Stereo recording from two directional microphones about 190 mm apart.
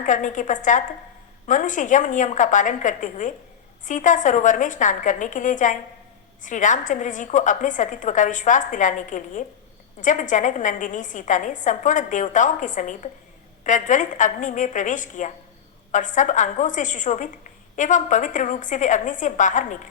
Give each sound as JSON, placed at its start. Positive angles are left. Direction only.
{"t": 0.0, "sound": "a woman's voice", "side_deg": 40}